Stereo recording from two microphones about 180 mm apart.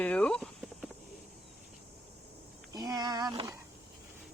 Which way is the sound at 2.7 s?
20° right (ahead or behind).